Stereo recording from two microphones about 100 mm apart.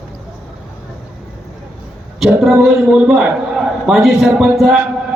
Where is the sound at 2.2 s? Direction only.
5° right (ahead or behind).